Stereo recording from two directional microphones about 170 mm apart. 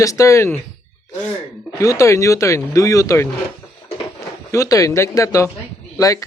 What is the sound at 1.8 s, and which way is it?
Speech, 20° left (ahead or behind).